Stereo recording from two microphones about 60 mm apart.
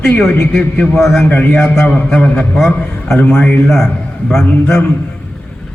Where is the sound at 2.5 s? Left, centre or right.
Centre.